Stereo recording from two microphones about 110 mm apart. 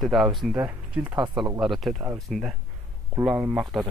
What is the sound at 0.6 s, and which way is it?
Speech, 15° right (ahead or behind).